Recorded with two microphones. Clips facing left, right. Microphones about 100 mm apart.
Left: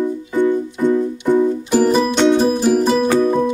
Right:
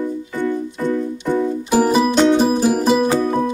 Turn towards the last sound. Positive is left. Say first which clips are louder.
# left 1 dB
turn(degrees=-5)  # may be behind; listen again after turning